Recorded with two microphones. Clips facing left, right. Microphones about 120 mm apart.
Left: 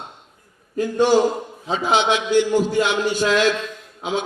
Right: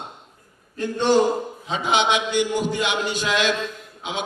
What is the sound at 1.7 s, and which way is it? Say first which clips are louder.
A man's voice: left 2 dB; 20° right (ahead or behind).